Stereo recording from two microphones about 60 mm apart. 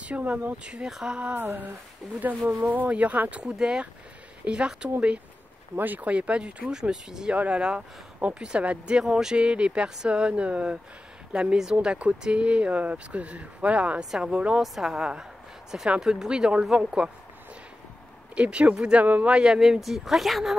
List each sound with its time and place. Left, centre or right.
0.0 s speech: right
0.7 s speech: centre
1.3 s a sound: right
2.2 s speech: right
11.8 s speech: centre
18.3 s speech: centre
19.3 s speech: centre